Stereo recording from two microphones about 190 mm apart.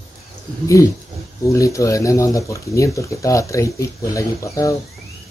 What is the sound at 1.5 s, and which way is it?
Speech, 15° left (ahead or behind).